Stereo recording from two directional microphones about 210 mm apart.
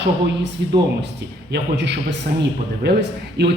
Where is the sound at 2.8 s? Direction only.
50° right (ahead or behind).